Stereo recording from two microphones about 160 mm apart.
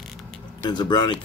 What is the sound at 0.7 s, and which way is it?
Speech, 25° left (ahead or behind).